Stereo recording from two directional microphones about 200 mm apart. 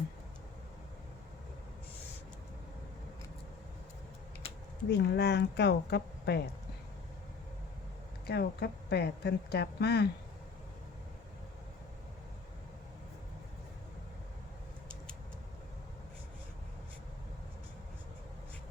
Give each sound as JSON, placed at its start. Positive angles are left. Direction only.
{"t": 4.9, "sound": "a woman's voice", "side_deg": 55}
{"t": 8.3, "sound": "a woman's voice", "side_deg": 55}